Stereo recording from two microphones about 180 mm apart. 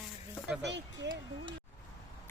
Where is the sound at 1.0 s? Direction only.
75° right (ahead or behind).